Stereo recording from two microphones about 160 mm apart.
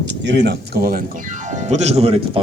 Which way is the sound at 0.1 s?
90° right.